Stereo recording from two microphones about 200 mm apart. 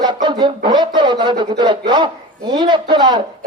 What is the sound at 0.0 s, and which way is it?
Speech, 20° right (ahead or behind).